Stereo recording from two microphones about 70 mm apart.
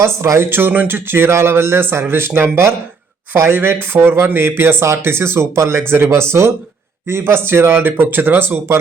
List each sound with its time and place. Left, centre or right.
0.0 s speech: right